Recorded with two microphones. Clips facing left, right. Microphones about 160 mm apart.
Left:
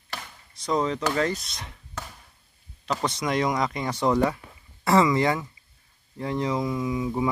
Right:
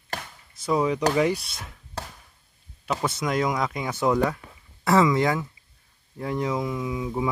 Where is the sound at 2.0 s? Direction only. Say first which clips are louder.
Right 2 dB; 35° right (ahead or behind).